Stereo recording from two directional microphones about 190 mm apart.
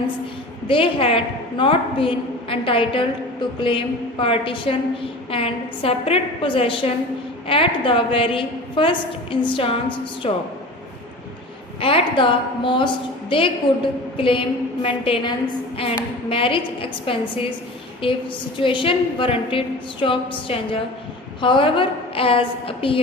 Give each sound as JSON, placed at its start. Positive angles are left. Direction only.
{"t": 0.7, "sound": "a woman's voice", "side_deg": 30}
{"t": 11.8, "sound": "a woman's voice", "side_deg": 30}
{"t": 16.3, "sound": "a woman's voice", "side_deg": 30}